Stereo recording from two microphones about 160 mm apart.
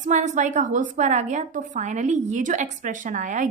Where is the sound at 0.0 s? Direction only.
50° right (ahead or behind).